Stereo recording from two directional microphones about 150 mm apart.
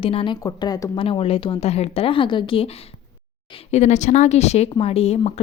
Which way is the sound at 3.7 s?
50° left (ahead or behind).